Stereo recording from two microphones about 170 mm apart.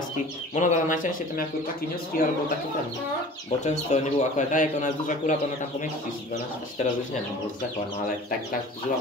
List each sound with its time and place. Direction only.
0.6 s speech: 50° left (ahead or behind)
3.6 s speech: 45° left (ahead or behind)